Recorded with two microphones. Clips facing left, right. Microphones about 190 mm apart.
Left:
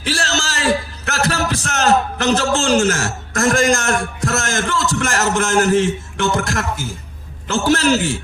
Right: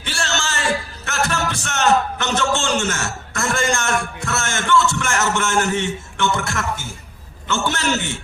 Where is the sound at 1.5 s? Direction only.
35° left (ahead or behind).